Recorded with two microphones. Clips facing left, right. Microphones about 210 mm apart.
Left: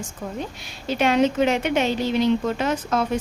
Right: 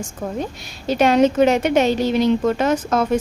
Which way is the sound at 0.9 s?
40° right (ahead or behind).